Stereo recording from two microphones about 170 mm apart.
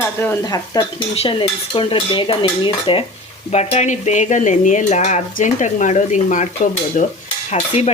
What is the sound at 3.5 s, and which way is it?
Dishes, 40° left (ahead or behind).